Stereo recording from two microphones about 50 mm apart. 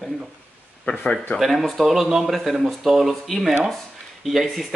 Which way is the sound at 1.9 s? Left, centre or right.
Centre.